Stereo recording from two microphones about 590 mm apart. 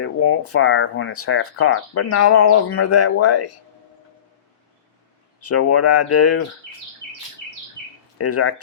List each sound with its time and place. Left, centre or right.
0.0 s speech: left
5.4 s speech: left
8.2 s speech: left